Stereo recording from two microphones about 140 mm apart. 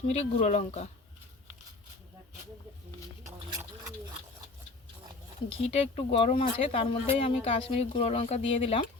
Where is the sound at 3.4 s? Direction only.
25° right (ahead or behind).